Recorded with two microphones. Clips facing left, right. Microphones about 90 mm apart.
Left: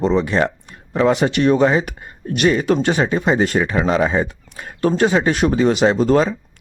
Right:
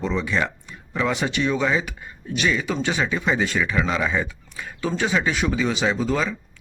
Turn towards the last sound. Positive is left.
turn(degrees=70)  # may be behind; listen again after turning